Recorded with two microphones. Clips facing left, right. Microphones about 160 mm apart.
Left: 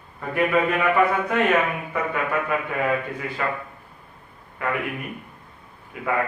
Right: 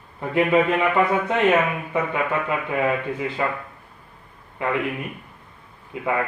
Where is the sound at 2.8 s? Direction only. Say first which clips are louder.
Right 2 dB; 20° right (ahead or behind).